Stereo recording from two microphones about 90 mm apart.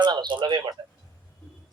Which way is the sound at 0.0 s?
55° right (ahead or behind).